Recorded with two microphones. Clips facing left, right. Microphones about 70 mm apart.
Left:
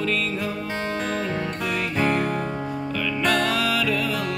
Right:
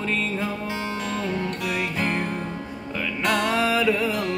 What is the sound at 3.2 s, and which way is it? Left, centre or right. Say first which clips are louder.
Music: right 1 dB; right.